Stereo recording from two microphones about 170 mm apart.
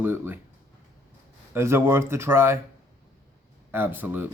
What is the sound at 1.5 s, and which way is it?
Speech, 15° right (ahead or behind).